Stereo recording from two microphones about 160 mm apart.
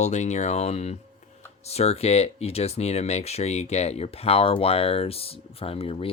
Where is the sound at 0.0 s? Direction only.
45° left (ahead or behind).